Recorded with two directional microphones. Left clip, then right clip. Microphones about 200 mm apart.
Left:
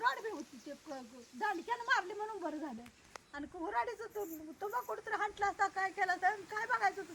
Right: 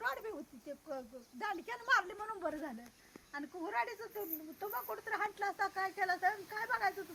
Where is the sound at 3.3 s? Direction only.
Centre (ahead or behind).